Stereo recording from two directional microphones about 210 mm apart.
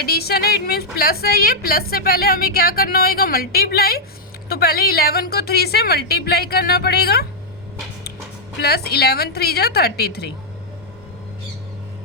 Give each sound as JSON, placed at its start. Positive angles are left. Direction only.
{"t": 0.0, "sound": "a woman's voice", "side_deg": 50}
{"t": 8.6, "sound": "a woman's voice", "side_deg": 50}